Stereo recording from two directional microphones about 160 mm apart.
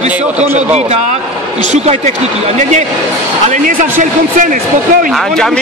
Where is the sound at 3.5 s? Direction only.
55° right (ahead or behind).